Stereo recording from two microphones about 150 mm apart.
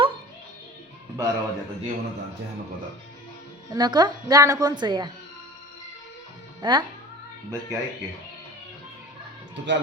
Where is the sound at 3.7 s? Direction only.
30° right (ahead or behind).